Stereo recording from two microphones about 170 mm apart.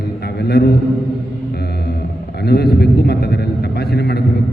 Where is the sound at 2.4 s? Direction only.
70° left (ahead or behind).